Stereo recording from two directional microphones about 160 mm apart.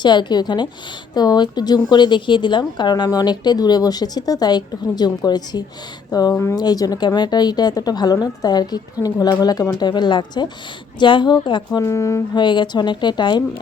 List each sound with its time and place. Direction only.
0.0 s a woman's voice: 30° left (ahead or behind)
11.8 s a woman's voice: 20° left (ahead or behind)